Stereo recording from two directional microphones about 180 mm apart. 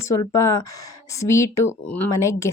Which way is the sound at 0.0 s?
15° left (ahead or behind).